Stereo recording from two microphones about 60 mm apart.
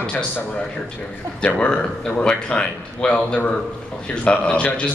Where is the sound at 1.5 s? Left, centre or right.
Centre.